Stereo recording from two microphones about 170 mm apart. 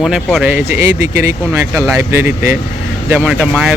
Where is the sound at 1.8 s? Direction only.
15° right (ahead or behind).